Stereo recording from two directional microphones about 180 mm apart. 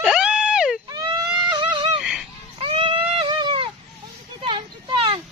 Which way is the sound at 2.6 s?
30° right (ahead or behind).